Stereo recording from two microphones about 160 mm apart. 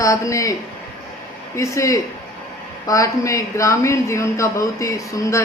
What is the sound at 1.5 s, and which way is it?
Speech, 20° left (ahead or behind).